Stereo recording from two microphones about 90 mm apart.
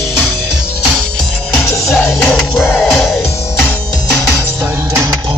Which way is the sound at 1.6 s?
30° left (ahead or behind).